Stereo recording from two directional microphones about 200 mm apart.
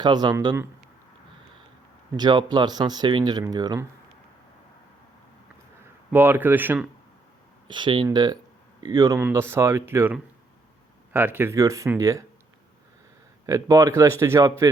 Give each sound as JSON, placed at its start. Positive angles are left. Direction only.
{"t": 0.0, "sound": "speech", "side_deg": -20}
{"t": 2.1, "sound": "speech", "side_deg": -20}
{"t": 6.1, "sound": "speech", "side_deg": -10}
{"t": 7.7, "sound": "speech", "side_deg": -25}
{"t": 13.4, "sound": "speech", "side_deg": -15}